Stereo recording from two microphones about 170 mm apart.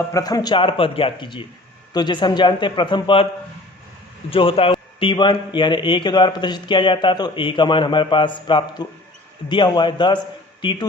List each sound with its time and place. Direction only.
0.1 s a man's voice: 20° left (ahead or behind)
4.3 s a man's voice: 30° left (ahead or behind)